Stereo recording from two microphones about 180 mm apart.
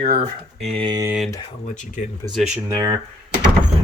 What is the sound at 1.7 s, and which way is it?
Speech, 45° left (ahead or behind).